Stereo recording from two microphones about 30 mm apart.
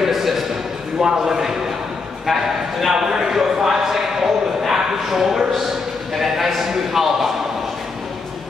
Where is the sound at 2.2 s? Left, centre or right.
Centre.